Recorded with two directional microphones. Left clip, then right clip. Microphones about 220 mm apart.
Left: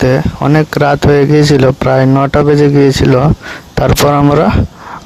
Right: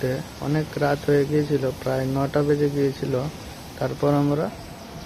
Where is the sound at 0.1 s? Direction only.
55° left (ahead or behind).